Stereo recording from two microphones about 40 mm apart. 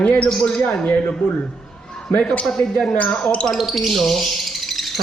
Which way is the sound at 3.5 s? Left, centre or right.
Centre.